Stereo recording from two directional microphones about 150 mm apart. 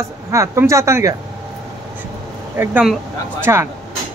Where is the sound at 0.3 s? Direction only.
20° right (ahead or behind).